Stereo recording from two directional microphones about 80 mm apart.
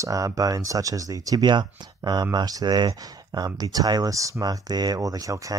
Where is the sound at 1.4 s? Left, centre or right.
Right.